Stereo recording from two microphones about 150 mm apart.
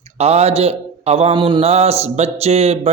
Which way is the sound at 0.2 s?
45° right (ahead or behind).